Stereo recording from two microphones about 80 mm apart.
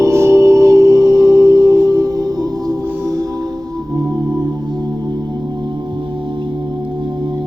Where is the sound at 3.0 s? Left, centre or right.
Right.